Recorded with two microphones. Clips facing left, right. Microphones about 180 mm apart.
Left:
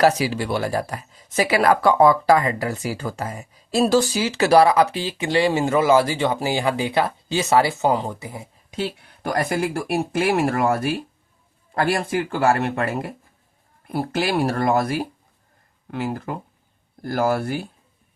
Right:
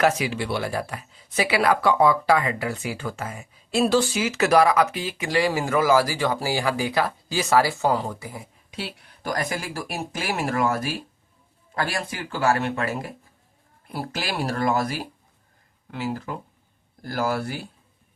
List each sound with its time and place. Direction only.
0.2 s speech: 40° left (ahead or behind); by 8.4 s 20° left (ahead or behind)
9.6 s speech: 55° left (ahead or behind)
11.7 s speech: 55° left (ahead or behind)